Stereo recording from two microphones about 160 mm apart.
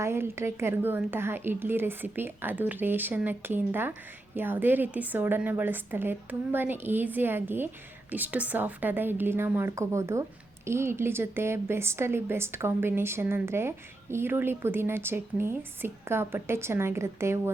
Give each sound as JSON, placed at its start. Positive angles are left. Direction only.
{"t": 0.0, "sound": "a woman's voice", "side_deg": -15}